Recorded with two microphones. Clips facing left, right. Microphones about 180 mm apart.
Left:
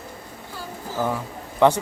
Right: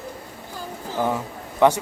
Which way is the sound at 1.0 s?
15° right (ahead or behind).